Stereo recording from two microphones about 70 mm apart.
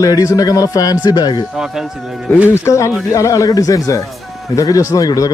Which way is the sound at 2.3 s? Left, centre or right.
Left.